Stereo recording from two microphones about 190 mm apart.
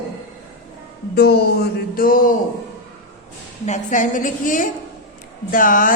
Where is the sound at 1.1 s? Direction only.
55° left (ahead or behind).